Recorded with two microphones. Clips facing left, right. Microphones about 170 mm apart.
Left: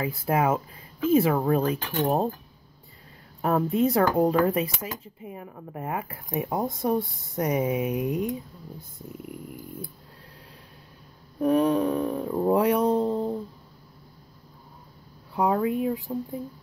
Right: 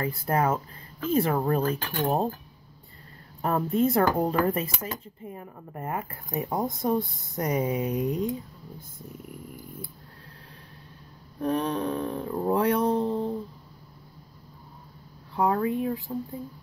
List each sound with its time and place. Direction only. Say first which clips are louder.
0.0 s speech: left 1 dB; centre (ahead or behind)
1.8 s speech: left 3 dB; 20° left (ahead or behind)
2.0 s speech: left 1 dB; centre (ahead or behind)
3.4 s speech: left 1 dB; centre (ahead or behind)
11.3 s speech: left 6 dB; 10° left (ahead or behind)
15.3 s speech: left 1 dB; 10° left (ahead or behind)